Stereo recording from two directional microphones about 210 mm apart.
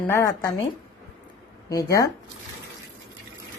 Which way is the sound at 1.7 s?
15° left (ahead or behind).